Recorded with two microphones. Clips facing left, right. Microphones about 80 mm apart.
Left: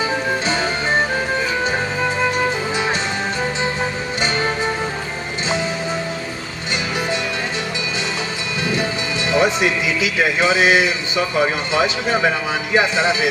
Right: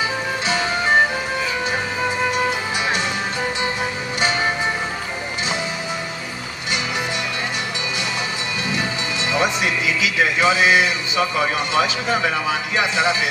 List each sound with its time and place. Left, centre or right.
9.3 s speech: left